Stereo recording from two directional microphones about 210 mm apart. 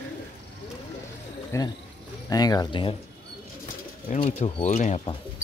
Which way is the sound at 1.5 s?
15° left (ahead or behind).